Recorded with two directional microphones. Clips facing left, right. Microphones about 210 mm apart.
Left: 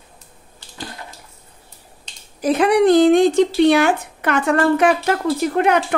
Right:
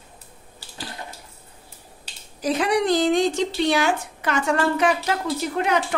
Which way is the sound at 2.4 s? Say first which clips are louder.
Left 7 dB; 55° left (ahead or behind).